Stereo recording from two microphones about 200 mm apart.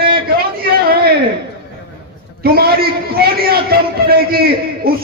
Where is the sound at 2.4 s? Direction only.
50° right (ahead or behind).